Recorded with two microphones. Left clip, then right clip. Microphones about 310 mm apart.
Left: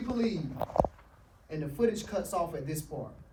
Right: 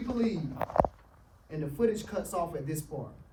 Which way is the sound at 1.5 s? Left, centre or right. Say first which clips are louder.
Even; centre.